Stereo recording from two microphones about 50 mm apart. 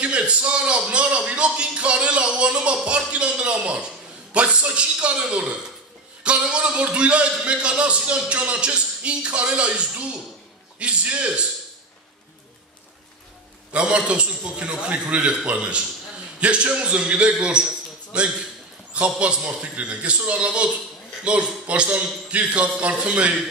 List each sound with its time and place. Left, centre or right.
0.0 s a man's voice: right
13.7 s a man's voice: right